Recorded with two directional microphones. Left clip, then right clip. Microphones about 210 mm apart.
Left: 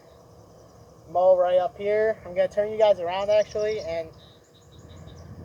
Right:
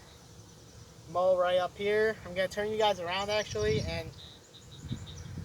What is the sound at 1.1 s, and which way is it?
Speech, 15° right (ahead or behind).